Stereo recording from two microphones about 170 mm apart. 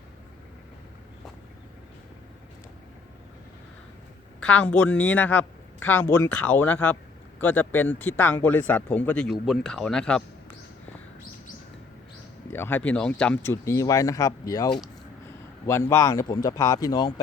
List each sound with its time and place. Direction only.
4.4 s speech: 5° left (ahead or behind)
12.5 s speech: 15° left (ahead or behind)